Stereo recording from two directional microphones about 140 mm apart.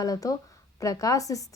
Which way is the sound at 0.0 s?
25° left (ahead or behind).